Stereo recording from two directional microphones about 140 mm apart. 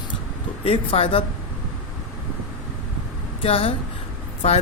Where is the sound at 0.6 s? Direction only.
45° left (ahead or behind).